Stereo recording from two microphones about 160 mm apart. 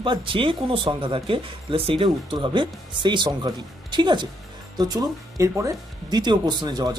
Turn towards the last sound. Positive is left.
turn(degrees=-25)  # may be behind; listen again after turning